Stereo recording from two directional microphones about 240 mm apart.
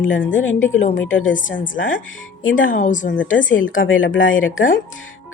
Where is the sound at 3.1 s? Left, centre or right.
Left.